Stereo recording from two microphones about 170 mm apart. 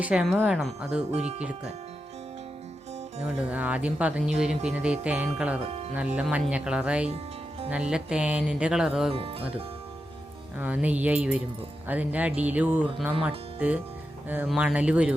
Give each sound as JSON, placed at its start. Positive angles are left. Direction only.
{"t": 0.0, "sound": "speech", "side_deg": -10}
{"t": 1.1, "sound": "speech", "side_deg": -40}
{"t": 1.4, "sound": "speech", "side_deg": -5}
{"t": 3.5, "sound": "speech", "side_deg": -10}
{"t": 5.6, "sound": "speech", "side_deg": -40}
{"t": 6.1, "sound": "speech", "side_deg": -10}
{"t": 9.1, "sound": "speech", "side_deg": -35}
{"t": 10.6, "sound": "speech", "side_deg": -10}